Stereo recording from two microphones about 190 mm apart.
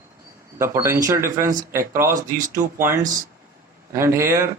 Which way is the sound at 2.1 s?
45° right (ahead or behind).